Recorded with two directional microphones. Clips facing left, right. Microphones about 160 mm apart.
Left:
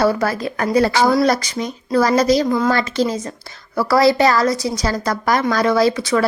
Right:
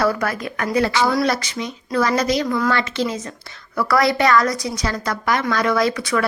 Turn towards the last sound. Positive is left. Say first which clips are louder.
# left 4 dB
turn(degrees=30)  # may be behind; listen again after turning